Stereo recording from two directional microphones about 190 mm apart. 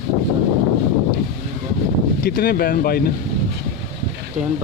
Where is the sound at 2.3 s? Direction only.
50° left (ahead or behind).